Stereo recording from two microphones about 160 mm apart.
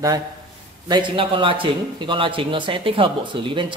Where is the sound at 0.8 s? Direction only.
30° right (ahead or behind).